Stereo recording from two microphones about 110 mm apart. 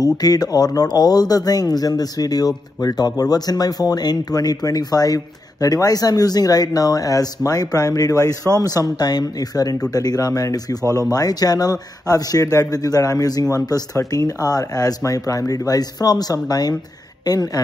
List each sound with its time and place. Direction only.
0.0 s speech: 35° left (ahead or behind)
10.9 s speech: 25° right (ahead or behind)
11.1 s a woman's voice: 35° left (ahead or behind)